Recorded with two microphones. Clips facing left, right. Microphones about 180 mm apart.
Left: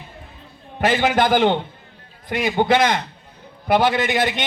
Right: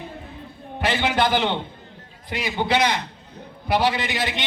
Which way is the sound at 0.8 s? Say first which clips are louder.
Left 4 dB; 45° left (ahead or behind).